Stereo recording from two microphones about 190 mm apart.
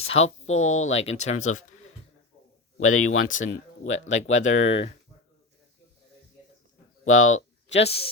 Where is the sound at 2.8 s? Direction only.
90° left.